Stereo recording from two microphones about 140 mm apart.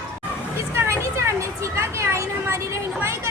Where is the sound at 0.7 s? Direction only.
20° right (ahead or behind).